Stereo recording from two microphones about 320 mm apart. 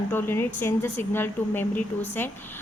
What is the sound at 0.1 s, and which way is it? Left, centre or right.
A woman's voice, centre.